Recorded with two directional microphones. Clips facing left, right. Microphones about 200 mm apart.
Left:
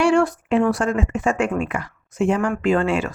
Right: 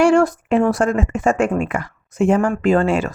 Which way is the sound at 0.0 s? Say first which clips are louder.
Right 3 dB; 45° right (ahead or behind).